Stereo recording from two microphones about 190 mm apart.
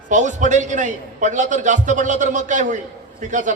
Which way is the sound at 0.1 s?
40° right (ahead or behind).